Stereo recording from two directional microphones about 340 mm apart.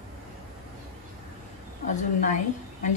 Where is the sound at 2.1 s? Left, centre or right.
Left.